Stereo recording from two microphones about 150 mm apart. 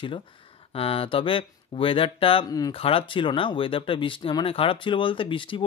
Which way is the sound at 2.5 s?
25° left (ahead or behind).